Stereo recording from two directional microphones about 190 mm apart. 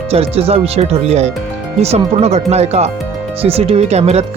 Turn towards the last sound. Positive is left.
turn(degrees=-35)  # may be behind; listen again after turning